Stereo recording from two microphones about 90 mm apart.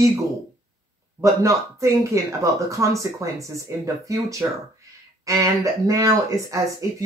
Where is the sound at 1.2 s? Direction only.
35° right (ahead or behind).